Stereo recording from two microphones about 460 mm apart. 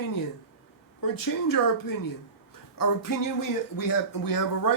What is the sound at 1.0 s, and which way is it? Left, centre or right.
Speech, left.